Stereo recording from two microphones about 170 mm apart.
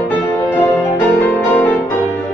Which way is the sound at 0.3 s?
15° left (ahead or behind).